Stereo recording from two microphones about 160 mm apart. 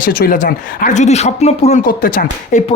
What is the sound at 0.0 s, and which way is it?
Speech, 60° left (ahead or behind).